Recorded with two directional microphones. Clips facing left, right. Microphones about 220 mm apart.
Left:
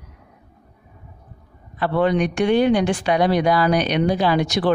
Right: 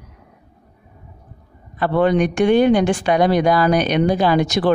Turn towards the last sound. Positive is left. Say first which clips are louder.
# right 3 dB
turn(degrees=-50)  # may be behind; listen again after turning